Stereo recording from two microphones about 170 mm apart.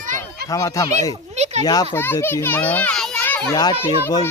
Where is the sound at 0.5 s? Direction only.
20° left (ahead or behind).